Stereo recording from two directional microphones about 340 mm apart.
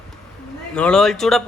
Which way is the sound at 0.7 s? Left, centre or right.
Centre.